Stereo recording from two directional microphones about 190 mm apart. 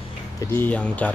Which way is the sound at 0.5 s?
10° left (ahead or behind).